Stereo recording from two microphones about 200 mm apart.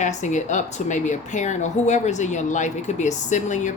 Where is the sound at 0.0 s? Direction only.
35° left (ahead or behind).